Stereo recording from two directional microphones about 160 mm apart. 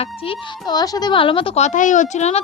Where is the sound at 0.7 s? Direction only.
25° left (ahead or behind); by 2.4 s 45° left (ahead or behind).